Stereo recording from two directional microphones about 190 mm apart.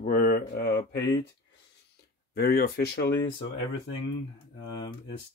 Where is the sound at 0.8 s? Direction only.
20° left (ahead or behind).